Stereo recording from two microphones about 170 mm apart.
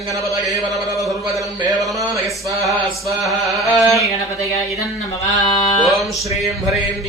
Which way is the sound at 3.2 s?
Centre (ahead or behind).